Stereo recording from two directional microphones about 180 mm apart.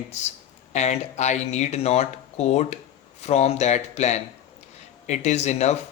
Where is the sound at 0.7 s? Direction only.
40° left (ahead or behind).